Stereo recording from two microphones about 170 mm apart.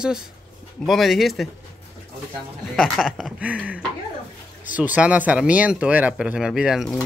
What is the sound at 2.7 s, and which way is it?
Speech, 5° left (ahead or behind).